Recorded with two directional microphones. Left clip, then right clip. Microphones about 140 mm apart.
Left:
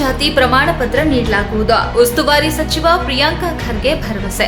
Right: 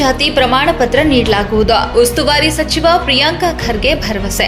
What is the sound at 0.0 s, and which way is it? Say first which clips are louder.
A woman's voice: right 2 dB; 15° right (ahead or behind).